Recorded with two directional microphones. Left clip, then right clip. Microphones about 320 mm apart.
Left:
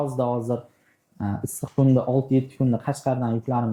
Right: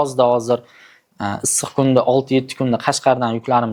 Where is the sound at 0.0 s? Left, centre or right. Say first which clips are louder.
Right 10 dB; right.